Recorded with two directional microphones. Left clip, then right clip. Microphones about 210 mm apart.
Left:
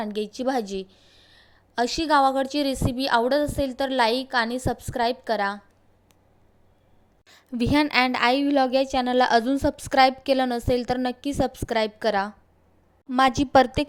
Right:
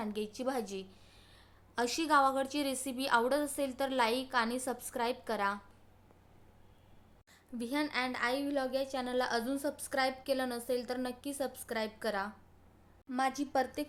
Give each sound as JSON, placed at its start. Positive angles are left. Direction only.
{"t": 0.0, "sound": "a woman's voice", "side_deg": 25}
{"t": 7.3, "sound": "a woman's voice", "side_deg": 35}